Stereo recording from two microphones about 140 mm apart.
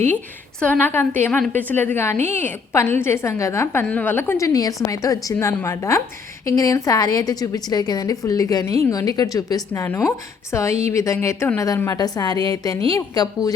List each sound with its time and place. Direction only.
0.6 s a woman's voice: 15° left (ahead or behind)